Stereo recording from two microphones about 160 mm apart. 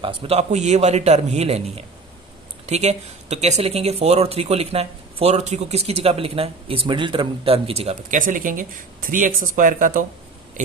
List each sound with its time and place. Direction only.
0.0 s a man's voice: 35° right (ahead or behind)
8.2 s speech: 55° right (ahead or behind)